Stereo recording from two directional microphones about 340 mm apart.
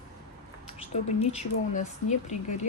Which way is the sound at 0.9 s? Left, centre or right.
Left.